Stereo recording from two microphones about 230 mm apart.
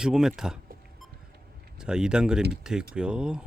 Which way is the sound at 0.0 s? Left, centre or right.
Centre.